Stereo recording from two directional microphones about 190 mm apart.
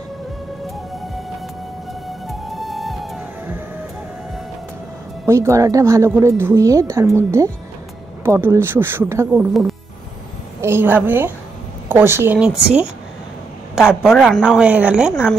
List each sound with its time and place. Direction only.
2.2 s music: centre (ahead or behind)
5.2 s speech: 15° right (ahead or behind)
13.7 s speech: 5° right (ahead or behind)